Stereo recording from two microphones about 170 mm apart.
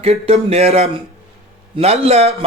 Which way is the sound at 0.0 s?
35° right (ahead or behind).